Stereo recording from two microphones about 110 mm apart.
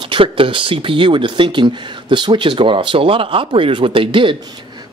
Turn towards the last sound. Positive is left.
turn(degrees=-50)  # may be behind; listen again after turning